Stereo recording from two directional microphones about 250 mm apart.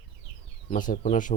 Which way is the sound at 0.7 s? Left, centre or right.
Left.